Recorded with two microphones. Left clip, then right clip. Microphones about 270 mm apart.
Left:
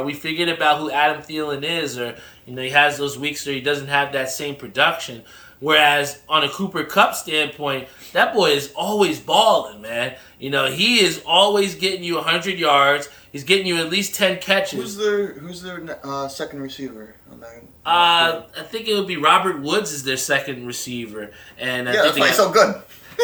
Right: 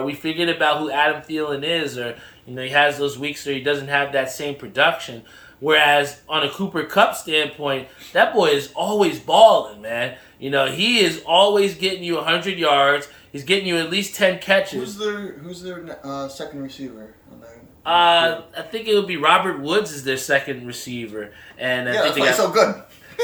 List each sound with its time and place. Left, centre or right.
0.0 s speech: centre
14.9 s speech: centre
17.8 s speech: centre
22.2 s speech: centre